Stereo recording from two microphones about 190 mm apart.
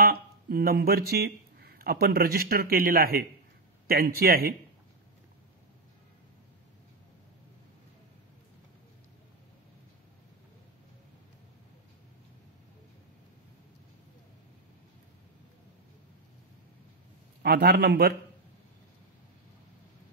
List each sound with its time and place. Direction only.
0.0 s speech: 55° right (ahead or behind)
17.4 s a man's voice: 60° right (ahead or behind)